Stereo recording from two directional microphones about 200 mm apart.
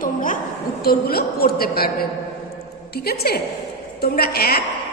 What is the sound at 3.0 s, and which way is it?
A woman's voice, 50° left (ahead or behind).